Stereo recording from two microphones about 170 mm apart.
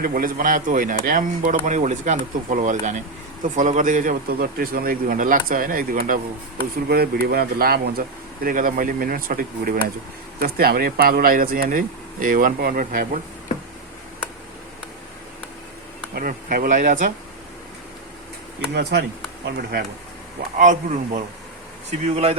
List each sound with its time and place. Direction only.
0.0 s speech: 55° right (ahead or behind)
6.8 s speech: 65° right (ahead or behind)
16.1 s speech: 55° right (ahead or behind)
18.7 s speech: 75° right (ahead or behind)
20.6 s speech: 45° right (ahead or behind)